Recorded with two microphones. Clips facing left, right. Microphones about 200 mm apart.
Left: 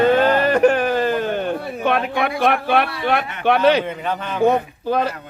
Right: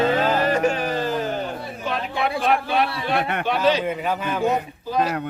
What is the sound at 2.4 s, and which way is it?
Speech, 60° left (ahead or behind).